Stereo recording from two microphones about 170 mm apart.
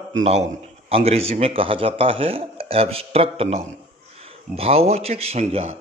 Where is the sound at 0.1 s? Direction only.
40° right (ahead or behind).